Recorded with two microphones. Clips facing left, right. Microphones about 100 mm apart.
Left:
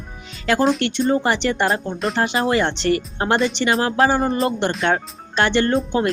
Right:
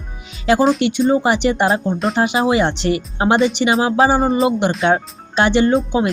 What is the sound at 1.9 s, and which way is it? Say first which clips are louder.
Speech: right 3 dB; centre (ahead or behind).